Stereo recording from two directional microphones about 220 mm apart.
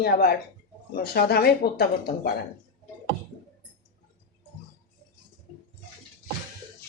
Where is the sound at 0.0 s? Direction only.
45° left (ahead or behind).